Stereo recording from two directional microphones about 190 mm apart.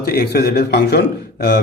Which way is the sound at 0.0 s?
55° left (ahead or behind).